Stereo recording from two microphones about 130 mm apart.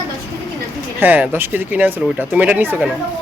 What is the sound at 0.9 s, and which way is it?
Speech, 15° right (ahead or behind).